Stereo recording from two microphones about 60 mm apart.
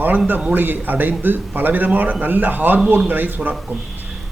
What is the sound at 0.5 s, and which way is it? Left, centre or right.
A man's voice, right.